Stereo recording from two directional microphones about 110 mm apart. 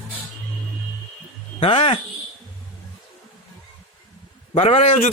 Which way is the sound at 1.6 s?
60° left (ahead or behind).